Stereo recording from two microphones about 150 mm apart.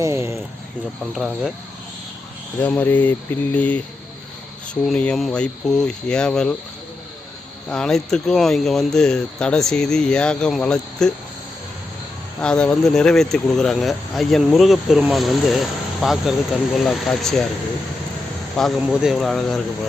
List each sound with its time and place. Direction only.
0.0 s speech: 20° right (ahead or behind)
1.1 s speech: centre (ahead or behind)
2.6 s speech: 10° left (ahead or behind)
7.7 s speech: 5° left (ahead or behind)
12.4 s speech: 5° left (ahead or behind)
18.8 s speech: 5° right (ahead or behind)